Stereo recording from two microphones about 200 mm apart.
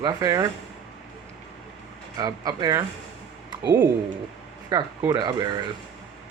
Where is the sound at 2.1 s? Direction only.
20° right (ahead or behind).